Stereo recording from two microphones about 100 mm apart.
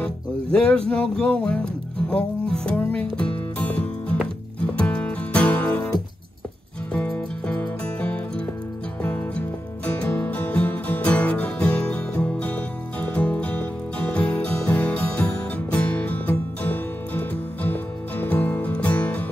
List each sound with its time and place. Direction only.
0.0 s music: 10° left (ahead or behind)
6.9 s music: 15° left (ahead or behind)